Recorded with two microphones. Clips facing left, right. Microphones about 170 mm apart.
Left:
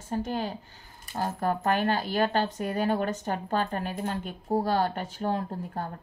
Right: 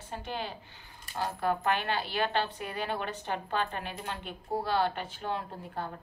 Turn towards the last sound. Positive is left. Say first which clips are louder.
# left 5 dB
turn(degrees=40)  # may be behind; listen again after turning